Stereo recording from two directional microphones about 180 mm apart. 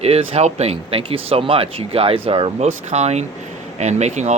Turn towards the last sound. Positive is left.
turn(degrees=-40)  # may be behind; listen again after turning